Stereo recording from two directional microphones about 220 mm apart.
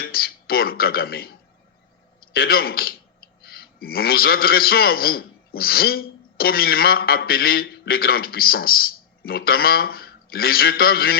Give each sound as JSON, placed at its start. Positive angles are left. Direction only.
{"t": 0.0, "sound": "a man's voice", "side_deg": 45}